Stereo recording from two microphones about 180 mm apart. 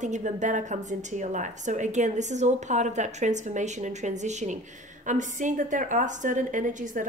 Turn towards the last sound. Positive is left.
turn(degrees=-45)  # may be behind; listen again after turning